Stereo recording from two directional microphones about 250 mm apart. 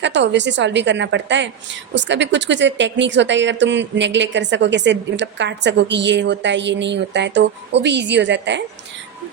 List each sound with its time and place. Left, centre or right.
0.0 s speech: right